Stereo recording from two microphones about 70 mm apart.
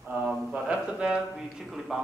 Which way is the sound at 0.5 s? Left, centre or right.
Centre.